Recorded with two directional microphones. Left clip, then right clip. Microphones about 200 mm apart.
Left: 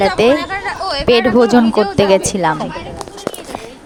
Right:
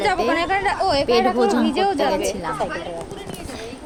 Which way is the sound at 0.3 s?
50° right (ahead or behind).